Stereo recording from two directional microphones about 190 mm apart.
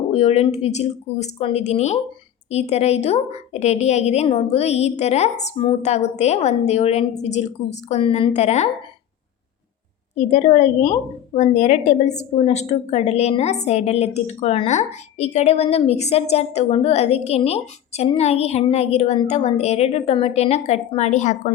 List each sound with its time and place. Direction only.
0.1 s a woman's voice: 35° left (ahead or behind)
10.2 s a woman's voice: 40° left (ahead or behind)